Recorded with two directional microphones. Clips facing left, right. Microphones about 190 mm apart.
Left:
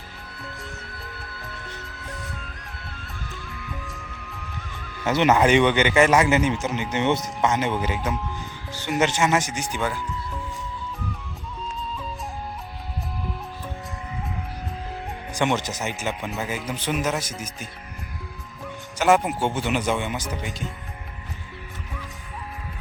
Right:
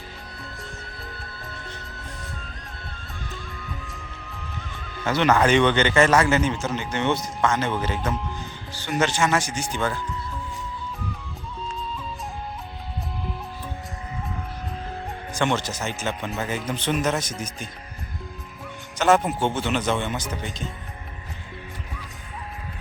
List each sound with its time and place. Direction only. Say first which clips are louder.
5.0 s a man's voice: left 1 dB; 20° left (ahead or behind)
15.3 s a man's voice: left 1 dB; 15° left (ahead or behind)
18.9 s a man's voice: even; 10° left (ahead or behind)